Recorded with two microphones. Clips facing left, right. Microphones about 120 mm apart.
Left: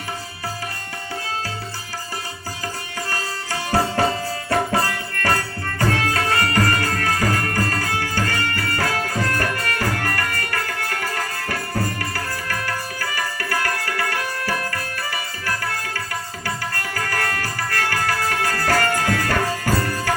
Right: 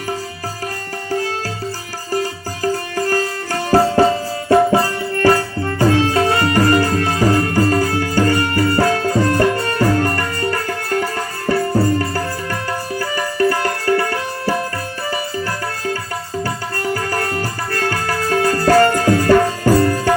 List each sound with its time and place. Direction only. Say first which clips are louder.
3.1 s music: right 7 dB; 45° right (ahead or behind)
4.4 s music: right 9 dB; 20° right (ahead or behind)
16.8 s music: right 7 dB; 25° right (ahead or behind)